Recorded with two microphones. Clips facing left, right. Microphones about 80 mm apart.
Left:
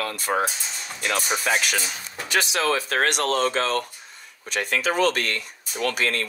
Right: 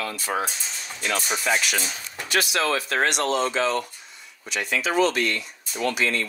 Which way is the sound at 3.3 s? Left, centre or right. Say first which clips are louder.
Even; left.